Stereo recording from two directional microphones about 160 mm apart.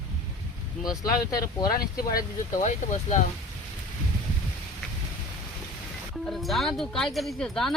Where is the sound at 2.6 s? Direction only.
50° left (ahead or behind).